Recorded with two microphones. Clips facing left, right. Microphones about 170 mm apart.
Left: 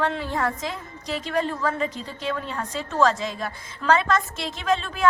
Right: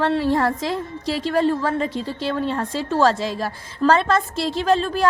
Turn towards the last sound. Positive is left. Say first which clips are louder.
# right 4 dB
turn(degrees=-35)  # may be behind; listen again after turning